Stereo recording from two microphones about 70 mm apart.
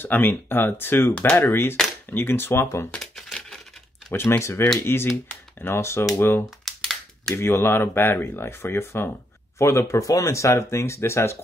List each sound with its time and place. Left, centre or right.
0.0 s speech: left
3.0 s crumpling: centre
4.1 s speech: left
6.6 s a sound: centre
7.3 s speech: left